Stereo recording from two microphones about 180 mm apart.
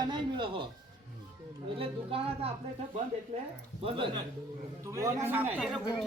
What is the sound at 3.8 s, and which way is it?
A man's voice, 30° right (ahead or behind).